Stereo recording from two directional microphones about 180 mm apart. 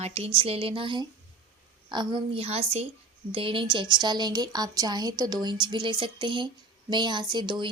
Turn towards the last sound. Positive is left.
turn(degrees=-25)  # may be behind; listen again after turning